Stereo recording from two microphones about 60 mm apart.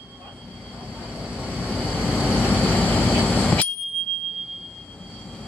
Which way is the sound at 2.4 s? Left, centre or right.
Left.